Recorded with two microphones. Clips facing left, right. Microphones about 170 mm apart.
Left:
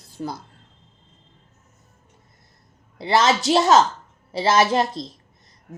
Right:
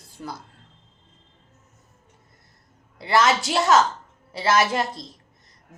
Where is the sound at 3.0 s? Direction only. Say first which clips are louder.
Left 1 dB; 20° left (ahead or behind).